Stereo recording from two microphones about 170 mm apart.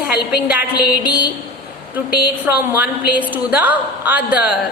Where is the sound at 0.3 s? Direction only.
10° right (ahead or behind).